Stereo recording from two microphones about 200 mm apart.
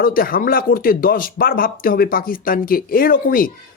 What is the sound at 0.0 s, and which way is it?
Speech, 45° left (ahead or behind).